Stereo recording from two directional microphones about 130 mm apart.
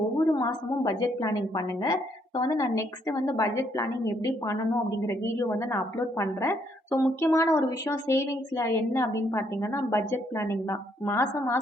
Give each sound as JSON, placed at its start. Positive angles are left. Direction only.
{"t": 0.3, "sound": "a woman's voice", "side_deg": 30}